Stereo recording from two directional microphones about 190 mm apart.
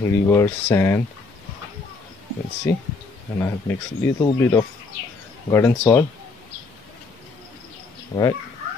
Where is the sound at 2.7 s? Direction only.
15° left (ahead or behind).